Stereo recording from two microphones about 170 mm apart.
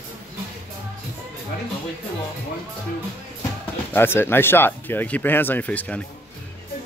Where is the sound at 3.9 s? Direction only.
15° left (ahead or behind).